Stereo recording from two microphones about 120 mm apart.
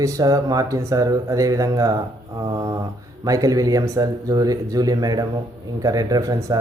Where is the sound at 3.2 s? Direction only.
30° right (ahead or behind).